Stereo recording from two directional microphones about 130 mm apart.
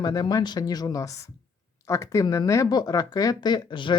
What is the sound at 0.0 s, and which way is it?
Speech, 30° left (ahead or behind).